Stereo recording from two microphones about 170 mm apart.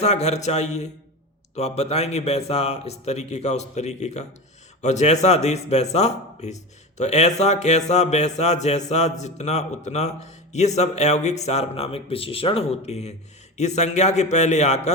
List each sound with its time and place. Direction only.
0.0 s a man's voice: 40° left (ahead or behind)